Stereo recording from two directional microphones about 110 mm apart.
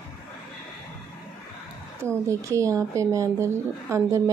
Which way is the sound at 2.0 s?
25° right (ahead or behind).